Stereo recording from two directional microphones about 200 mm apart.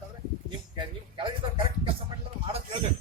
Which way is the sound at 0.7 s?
25° right (ahead or behind).